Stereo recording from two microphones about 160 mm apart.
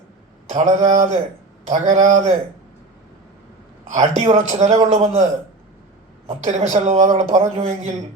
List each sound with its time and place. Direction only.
0.5 s a man's voice: 50° right (ahead or behind)
3.8 s a man's voice: 50° right (ahead or behind)
6.2 s a man's voice: 45° right (ahead or behind)